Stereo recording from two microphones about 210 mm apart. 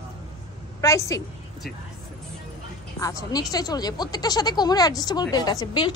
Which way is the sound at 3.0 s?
15° left (ahead or behind).